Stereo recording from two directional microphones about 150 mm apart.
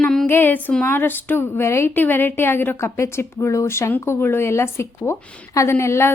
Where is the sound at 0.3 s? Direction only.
15° left (ahead or behind).